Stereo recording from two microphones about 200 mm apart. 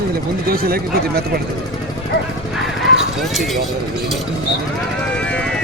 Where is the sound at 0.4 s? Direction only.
45° right (ahead or behind).